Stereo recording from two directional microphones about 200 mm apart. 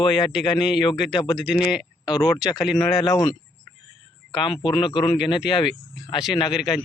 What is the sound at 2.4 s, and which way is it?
Speech, 5° right (ahead or behind).